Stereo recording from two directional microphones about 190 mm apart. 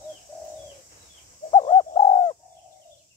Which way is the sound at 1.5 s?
25° left (ahead or behind).